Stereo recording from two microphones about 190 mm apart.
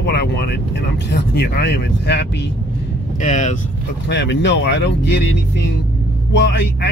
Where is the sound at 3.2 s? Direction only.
40° left (ahead or behind).